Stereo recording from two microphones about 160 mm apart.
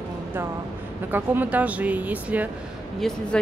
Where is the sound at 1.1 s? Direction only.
10° right (ahead or behind).